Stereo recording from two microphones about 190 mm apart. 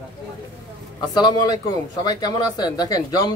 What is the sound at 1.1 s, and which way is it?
Speech, 20° left (ahead or behind).